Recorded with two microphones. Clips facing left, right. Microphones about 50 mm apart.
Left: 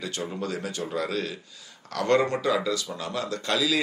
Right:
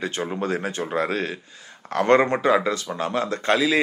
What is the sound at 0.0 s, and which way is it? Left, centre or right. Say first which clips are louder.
A man's voice: right 5 dB; right.